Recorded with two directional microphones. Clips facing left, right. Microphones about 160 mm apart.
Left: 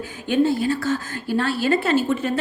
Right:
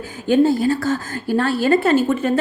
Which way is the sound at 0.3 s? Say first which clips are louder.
Right 4 dB; 40° right (ahead or behind).